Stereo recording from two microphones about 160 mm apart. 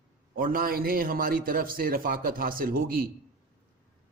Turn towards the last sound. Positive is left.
turn(degrees=-65)  # may be behind; listen again after turning